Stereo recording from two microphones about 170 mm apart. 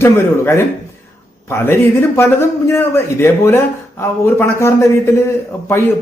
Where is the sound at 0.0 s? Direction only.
15° left (ahead or behind).